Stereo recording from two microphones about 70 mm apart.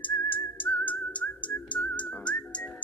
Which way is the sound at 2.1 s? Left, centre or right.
Left.